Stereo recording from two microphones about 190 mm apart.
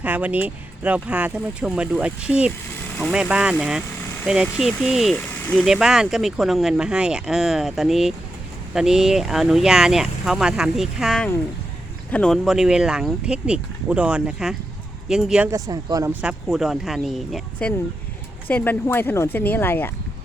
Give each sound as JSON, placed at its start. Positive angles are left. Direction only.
{"t": 0.0, "sound": "speech", "side_deg": -10}
{"t": 15.4, "sound": "speech", "side_deg": -20}
{"t": 16.2, "sound": "speech", "side_deg": 0}